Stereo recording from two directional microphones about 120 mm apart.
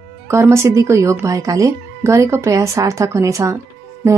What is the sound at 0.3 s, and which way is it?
A woman's voice, 25° right (ahead or behind).